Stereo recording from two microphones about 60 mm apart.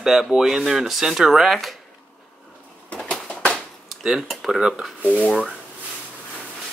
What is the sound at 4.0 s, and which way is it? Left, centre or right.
Speech, centre.